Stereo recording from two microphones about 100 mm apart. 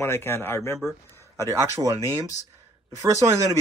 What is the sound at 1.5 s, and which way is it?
Speech, 30° right (ahead or behind).